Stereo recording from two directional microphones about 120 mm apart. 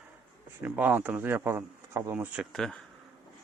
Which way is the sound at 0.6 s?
15° right (ahead or behind).